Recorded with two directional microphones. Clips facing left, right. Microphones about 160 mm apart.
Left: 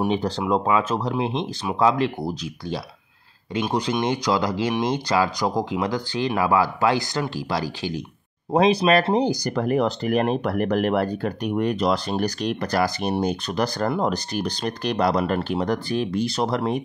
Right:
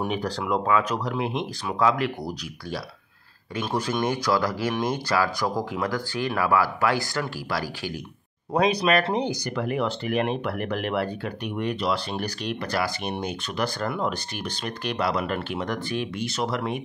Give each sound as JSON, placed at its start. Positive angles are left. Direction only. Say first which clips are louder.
{"t": 0.0, "sound": "speech", "louder": "left 5 dB", "side_deg": 20}